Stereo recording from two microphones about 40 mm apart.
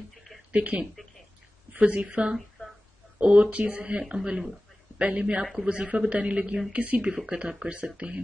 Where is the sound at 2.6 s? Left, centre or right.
Left.